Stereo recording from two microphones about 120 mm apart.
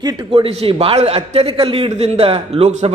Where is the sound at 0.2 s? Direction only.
45° right (ahead or behind).